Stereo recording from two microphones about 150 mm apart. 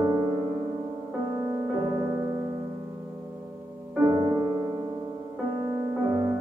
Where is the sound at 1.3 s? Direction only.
15° right (ahead or behind).